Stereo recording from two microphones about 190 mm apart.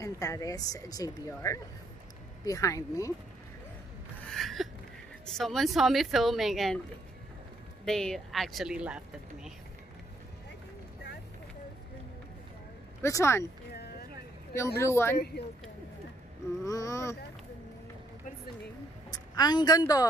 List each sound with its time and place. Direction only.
0.0 s a woman's voice: 15° left (ahead or behind)
4.3 s a sound: centre (ahead or behind)
5.2 s speech: centre (ahead or behind)
7.8 s speech: 5° left (ahead or behind)
13.0 s a woman's voice: 15° left (ahead or behind)
14.8 s a woman's voice: 15° left (ahead or behind)
15.1 s a woman's voice: 55° left (ahead or behind)
16.6 s a woman's voice: 15° left (ahead or behind)
19.3 s a woman's voice: 20° left (ahead or behind)